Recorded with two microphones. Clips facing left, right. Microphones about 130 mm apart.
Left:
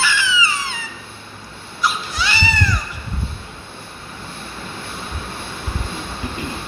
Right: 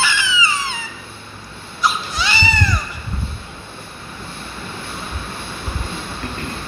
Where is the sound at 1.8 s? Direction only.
20° right (ahead or behind).